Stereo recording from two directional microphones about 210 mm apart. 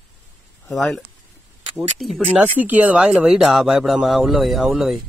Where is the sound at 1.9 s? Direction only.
Centre (ahead or behind).